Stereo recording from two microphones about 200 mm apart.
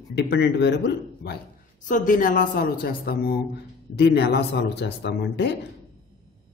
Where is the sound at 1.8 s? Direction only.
40° left (ahead or behind); by 5.5 s 60° left (ahead or behind).